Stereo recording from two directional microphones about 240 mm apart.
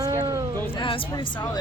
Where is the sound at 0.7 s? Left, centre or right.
Left.